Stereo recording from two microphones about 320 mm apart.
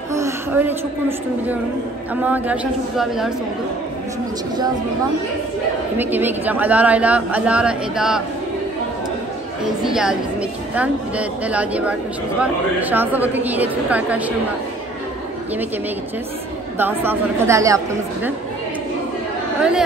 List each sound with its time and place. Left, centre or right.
0.1 s a woman's voice: centre
5.9 s speech: centre
9.8 s speech: centre
16.7 s a woman's voice: centre